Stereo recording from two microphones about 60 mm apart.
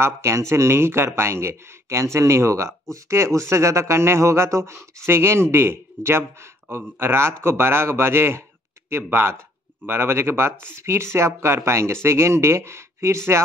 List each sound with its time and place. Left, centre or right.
0.0 s a man's voice: right